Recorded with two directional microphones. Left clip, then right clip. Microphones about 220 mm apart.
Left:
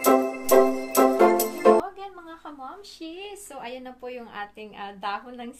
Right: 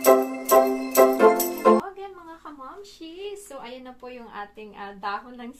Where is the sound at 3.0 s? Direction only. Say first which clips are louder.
Right 3 dB; 30° left (ahead or behind).